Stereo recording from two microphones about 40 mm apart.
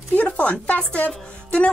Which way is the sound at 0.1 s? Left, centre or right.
Left.